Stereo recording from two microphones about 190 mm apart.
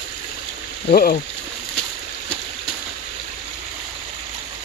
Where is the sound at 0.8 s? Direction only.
50° left (ahead or behind).